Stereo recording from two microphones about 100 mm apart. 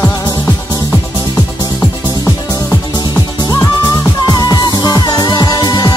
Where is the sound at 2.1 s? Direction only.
35° left (ahead or behind).